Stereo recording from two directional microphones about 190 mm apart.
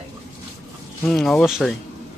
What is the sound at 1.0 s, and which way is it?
Speech, centre (ahead or behind).